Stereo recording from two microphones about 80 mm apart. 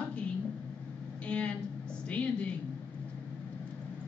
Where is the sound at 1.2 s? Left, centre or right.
Centre.